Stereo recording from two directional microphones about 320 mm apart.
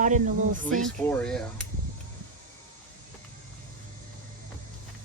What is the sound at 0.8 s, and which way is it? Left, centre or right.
Speech, centre.